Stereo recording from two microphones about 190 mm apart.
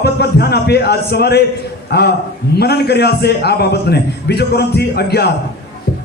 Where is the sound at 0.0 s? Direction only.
60° left (ahead or behind).